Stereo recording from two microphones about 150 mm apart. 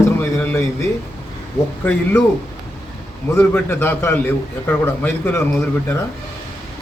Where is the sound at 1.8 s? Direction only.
10° left (ahead or behind).